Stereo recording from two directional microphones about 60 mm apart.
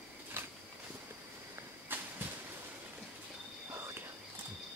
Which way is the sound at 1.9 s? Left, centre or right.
Right.